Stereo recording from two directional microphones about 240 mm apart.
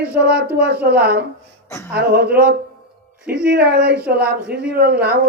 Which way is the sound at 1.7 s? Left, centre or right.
Centre.